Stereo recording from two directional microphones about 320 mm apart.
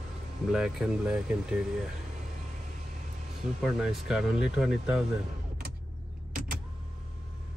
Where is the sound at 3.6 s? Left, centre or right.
Centre.